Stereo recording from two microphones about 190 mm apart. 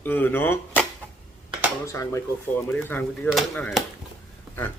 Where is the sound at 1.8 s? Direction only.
15° left (ahead or behind).